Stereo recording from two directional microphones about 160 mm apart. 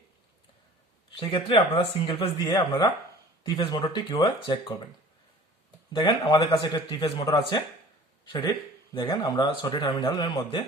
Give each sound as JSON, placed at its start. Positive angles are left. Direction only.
{"t": 1.3, "sound": "speech", "side_deg": 35}
{"t": 5.9, "sound": "speech", "side_deg": 30}